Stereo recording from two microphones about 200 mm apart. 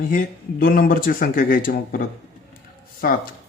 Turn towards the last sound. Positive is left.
turn(degrees=45)  # may be behind; listen again after turning